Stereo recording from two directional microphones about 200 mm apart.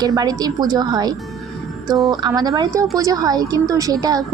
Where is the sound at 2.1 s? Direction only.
20° right (ahead or behind).